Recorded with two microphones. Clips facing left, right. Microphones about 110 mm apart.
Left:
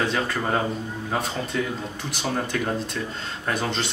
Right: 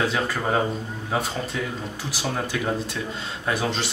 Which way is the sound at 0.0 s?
5° right (ahead or behind).